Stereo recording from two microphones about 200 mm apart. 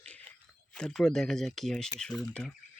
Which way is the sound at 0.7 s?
5° left (ahead or behind).